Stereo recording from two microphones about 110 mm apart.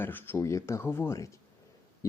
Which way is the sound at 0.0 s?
20° left (ahead or behind).